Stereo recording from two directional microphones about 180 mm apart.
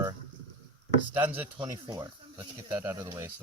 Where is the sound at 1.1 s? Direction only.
10° right (ahead or behind).